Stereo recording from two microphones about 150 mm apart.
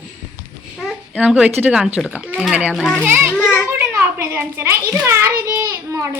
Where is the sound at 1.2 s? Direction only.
10° right (ahead or behind).